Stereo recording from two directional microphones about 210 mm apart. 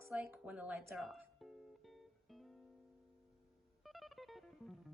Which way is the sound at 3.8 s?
Centre (ahead or behind).